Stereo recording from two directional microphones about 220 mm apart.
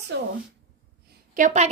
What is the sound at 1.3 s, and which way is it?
Speech, 35° right (ahead or behind).